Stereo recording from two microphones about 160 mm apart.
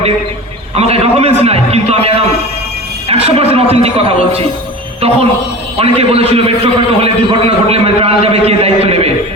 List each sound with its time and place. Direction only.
0.8 s a man's voice: 40° right (ahead or behind)